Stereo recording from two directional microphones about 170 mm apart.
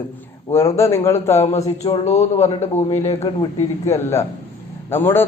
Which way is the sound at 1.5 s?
40° left (ahead or behind).